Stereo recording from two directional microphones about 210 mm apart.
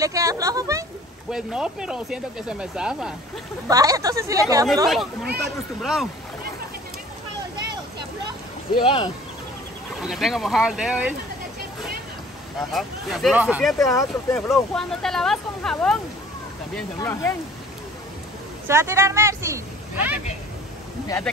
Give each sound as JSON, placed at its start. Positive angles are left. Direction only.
{"t": 0.0, "sound": "speech", "side_deg": -15}
{"t": 1.3, "sound": "speech", "side_deg": -5}
{"t": 3.6, "sound": "speech", "side_deg": -15}
{"t": 4.8, "sound": "speech", "side_deg": 0}
{"t": 8.7, "sound": "speech", "side_deg": 25}
{"t": 10.0, "sound": "speech", "side_deg": 0}
{"t": 12.7, "sound": "speech", "side_deg": 0}
{"t": 13.8, "sound": "speech", "side_deg": 15}
{"t": 18.7, "sound": "speech", "side_deg": -10}